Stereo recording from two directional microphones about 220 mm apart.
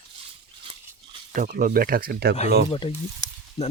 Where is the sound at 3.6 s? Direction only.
25° left (ahead or behind).